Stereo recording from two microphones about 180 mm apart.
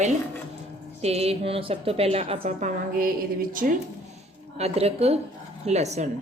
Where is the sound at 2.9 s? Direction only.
50° right (ahead or behind).